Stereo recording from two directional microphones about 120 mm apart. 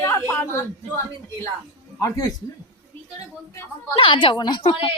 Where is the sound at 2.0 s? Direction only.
35° left (ahead or behind).